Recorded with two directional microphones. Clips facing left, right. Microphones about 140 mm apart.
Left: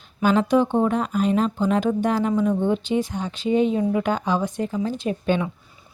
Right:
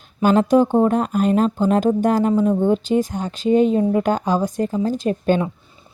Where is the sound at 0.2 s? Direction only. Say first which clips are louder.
Right 4 dB; 45° right (ahead or behind).